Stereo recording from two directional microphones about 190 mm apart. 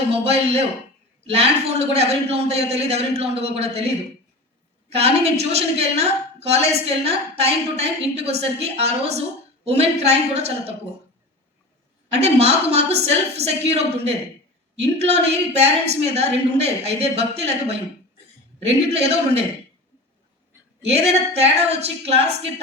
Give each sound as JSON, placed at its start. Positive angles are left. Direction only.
{"t": 0.1, "sound": "a woman's voice", "side_deg": -30}
{"t": 4.9, "sound": "a woman's voice", "side_deg": -30}
{"t": 12.2, "sound": "a woman's voice", "side_deg": -35}
{"t": 20.8, "sound": "a woman's voice", "side_deg": -35}